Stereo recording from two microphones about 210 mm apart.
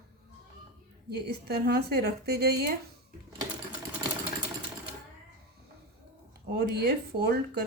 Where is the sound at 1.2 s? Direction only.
50° right (ahead or behind).